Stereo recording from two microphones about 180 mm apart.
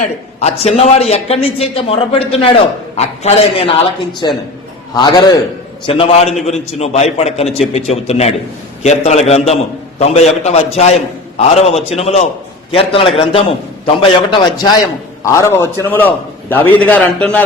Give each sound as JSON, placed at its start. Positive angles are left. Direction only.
{"t": 0.0, "sound": "a man's voice", "side_deg": 40}